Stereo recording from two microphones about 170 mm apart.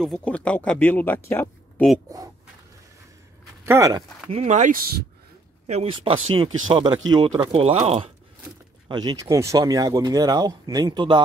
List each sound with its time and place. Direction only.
0.0 s speech: 5° left (ahead or behind)
2.0 s speech: 20° right (ahead or behind)
3.6 s speech: 15° right (ahead or behind)
4.3 s speech: 40° right (ahead or behind)
5.7 s speech: 35° right (ahead or behind)
8.8 s speech: 25° right (ahead or behind)